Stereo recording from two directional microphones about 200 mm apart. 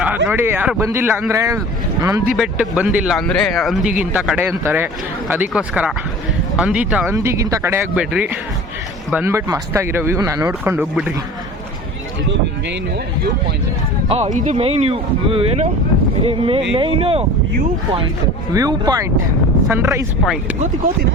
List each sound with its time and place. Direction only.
0.3 s speech: 10° right (ahead or behind)
2.3 s speech: 5° right (ahead or behind)
14.1 s speech: 35° right (ahead or behind)
18.5 s speech: 15° right (ahead or behind)
20.2 s speech: centre (ahead or behind)
20.6 s speech: 40° right (ahead or behind)